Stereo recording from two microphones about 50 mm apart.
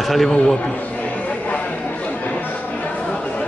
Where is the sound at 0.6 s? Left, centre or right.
Left.